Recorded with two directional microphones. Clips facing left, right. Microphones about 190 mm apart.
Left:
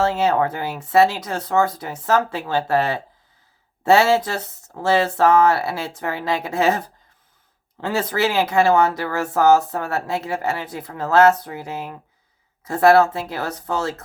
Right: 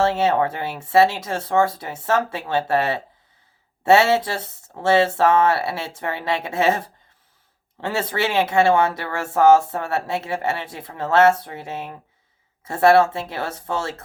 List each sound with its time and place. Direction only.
0.0 s speech: 25° right (ahead or behind)